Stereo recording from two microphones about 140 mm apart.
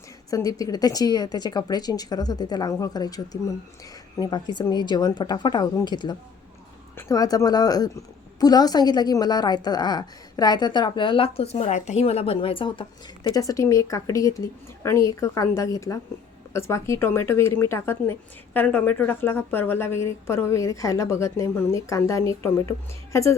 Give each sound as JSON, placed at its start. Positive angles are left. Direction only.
{"t": 0.3, "sound": "a woman's voice", "side_deg": 25}